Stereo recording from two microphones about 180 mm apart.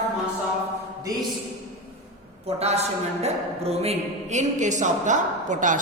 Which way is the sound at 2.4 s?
35° right (ahead or behind).